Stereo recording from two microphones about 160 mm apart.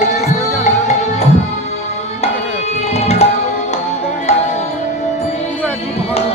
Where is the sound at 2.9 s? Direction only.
40° left (ahead or behind).